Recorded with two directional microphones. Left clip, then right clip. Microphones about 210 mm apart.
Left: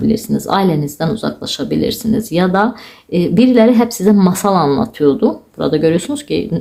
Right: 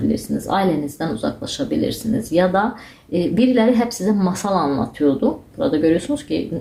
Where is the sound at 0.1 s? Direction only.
30° left (ahead or behind).